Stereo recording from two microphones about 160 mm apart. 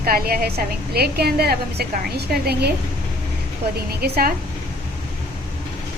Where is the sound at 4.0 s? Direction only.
65° right (ahead or behind).